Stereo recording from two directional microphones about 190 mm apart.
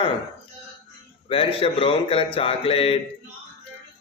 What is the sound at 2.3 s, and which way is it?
Mantra, 30° left (ahead or behind).